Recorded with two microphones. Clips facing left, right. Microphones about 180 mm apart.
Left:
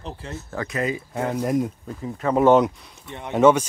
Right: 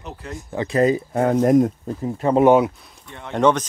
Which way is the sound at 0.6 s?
35° right (ahead or behind).